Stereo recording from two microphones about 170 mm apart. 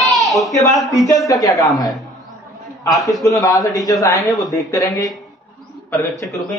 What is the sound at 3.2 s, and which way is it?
A man's voice, 20° left (ahead or behind).